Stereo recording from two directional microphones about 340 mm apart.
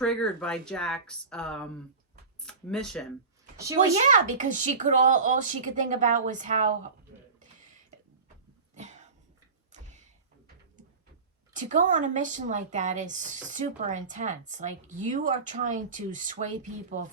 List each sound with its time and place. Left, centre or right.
0.0 s speech: centre
3.6 s speech: centre
4.0 s a woman's voice: right
8.7 s cough: right
9.7 s a sound: right
11.5 s a woman's voice: right